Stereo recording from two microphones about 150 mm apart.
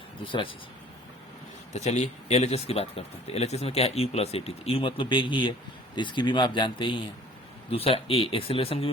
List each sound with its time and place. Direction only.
0.3 s speech: 35° left (ahead or behind)
1.7 s speech: 50° left (ahead or behind)